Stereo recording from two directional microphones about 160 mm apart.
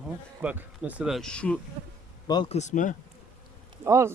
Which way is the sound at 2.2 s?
25° left (ahead or behind).